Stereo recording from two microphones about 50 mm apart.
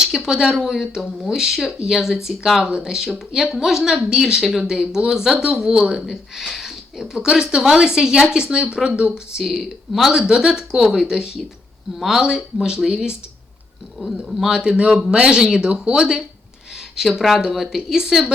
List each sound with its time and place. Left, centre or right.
0.0 s speech: centre
7.6 s speech: centre
9.4 s speech: centre
14.3 s speech: centre